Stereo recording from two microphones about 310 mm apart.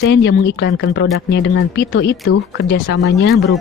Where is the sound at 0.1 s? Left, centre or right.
Left.